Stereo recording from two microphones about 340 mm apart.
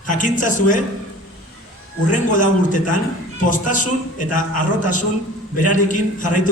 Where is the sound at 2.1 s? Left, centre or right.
Left.